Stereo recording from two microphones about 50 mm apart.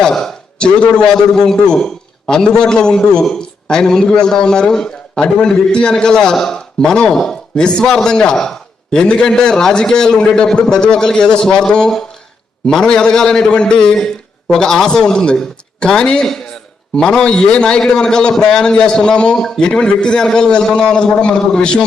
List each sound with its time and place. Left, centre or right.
0.0 s a man's voice: centre